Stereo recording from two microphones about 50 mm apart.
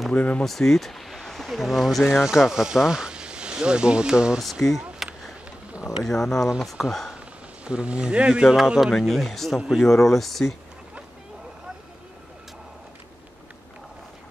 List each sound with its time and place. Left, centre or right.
0.1 s speech: left
0.4 s speech: centre
4.4 s speech: centre
6.0 s speech: centre
7.6 s speech: right
8.4 s speech: centre